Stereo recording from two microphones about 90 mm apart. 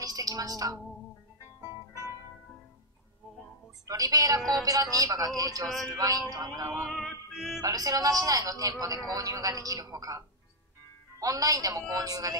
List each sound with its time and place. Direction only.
0.0 s a sound: 45° right (ahead or behind)
3.8 s music: 45° right (ahead or behind)
6.9 s music: centre (ahead or behind)
7.6 s a man's voice: 45° right (ahead or behind)